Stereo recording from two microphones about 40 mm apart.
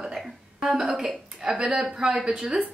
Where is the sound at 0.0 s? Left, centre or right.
Centre.